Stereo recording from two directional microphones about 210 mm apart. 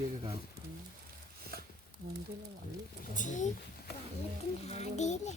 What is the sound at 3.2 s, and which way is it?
Speech, 35° left (ahead or behind).